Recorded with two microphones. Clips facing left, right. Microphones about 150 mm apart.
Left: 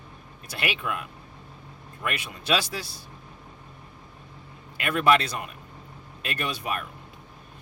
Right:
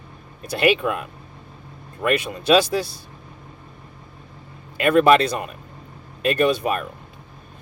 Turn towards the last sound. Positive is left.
turn(degrees=-30)  # may be behind; listen again after turning